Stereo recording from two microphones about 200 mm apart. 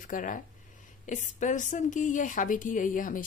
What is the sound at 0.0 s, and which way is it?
Speech, 40° left (ahead or behind).